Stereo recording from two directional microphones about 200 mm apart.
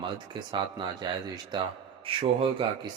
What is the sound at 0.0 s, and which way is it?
Speech, 25° right (ahead or behind).